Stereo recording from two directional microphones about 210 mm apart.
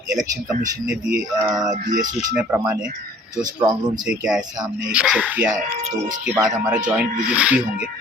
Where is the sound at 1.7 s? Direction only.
35° right (ahead or behind).